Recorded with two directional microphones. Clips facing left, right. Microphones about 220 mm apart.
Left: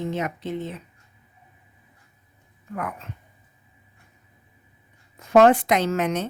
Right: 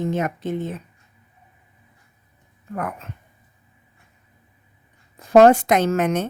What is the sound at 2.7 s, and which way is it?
Speech, 45° right (ahead or behind).